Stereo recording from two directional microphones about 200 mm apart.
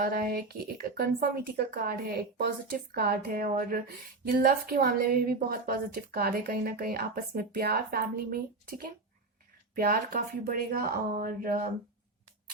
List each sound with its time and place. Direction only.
0.0 s a woman's voice: 45° right (ahead or behind)
9.7 s a woman's voice: 45° right (ahead or behind)